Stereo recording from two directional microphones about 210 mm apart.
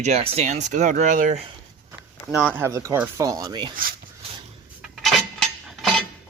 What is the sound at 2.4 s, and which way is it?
Speech, 10° right (ahead or behind).